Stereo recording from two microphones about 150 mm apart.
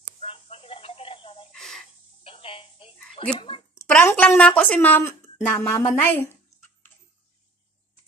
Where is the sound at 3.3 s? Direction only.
35° left (ahead or behind).